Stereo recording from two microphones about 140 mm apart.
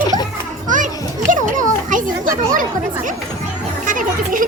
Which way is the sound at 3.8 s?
75° right (ahead or behind).